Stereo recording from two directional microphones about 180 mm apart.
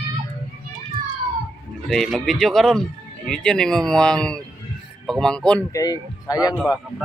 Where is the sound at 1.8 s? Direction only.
Centre (ahead or behind).